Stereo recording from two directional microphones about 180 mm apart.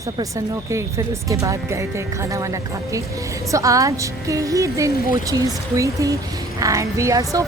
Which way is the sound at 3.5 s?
20° right (ahead or behind).